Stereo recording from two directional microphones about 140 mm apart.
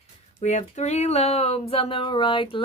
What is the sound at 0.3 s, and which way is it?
Speech, 55° left (ahead or behind).